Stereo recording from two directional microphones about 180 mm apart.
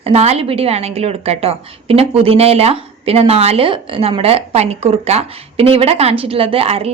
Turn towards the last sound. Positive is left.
turn(degrees=-35)  # may be behind; listen again after turning